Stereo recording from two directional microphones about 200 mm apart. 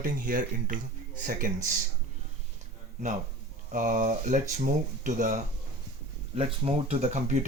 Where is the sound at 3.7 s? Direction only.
40° right (ahead or behind).